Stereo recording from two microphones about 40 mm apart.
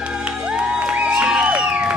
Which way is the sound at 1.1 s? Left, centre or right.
Centre.